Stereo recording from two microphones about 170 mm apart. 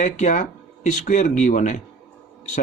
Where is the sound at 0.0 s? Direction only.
45° left (ahead or behind).